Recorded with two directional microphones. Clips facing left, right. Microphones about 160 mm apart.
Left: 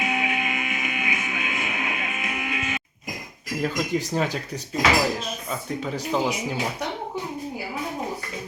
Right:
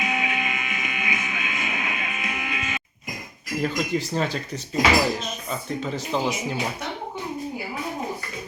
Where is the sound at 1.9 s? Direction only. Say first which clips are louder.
Left 1 dB; 45° left (ahead or behind).